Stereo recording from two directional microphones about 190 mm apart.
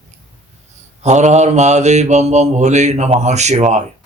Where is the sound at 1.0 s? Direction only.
35° right (ahead or behind).